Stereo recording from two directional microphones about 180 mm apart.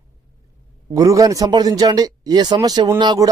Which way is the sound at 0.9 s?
20° right (ahead or behind).